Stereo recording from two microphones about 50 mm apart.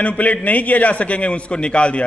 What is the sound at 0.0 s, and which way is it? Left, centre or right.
A man's voice, left.